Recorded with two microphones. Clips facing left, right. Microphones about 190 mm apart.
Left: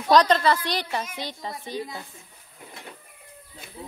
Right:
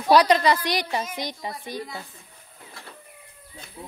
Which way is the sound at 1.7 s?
15° left (ahead or behind).